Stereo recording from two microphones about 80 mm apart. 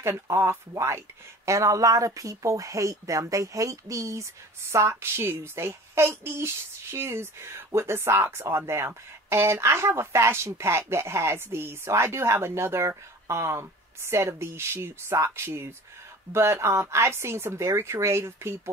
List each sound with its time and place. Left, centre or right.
0.0 s speech: right